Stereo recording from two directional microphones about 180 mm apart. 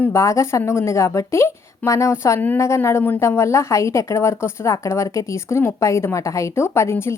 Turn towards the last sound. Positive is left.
turn(degrees=15)  # may be behind; listen again after turning